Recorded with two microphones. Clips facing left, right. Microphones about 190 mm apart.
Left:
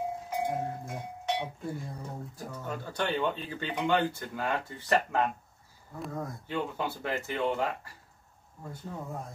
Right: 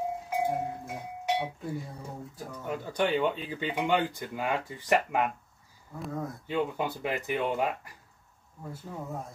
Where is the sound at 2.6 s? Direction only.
15° right (ahead or behind).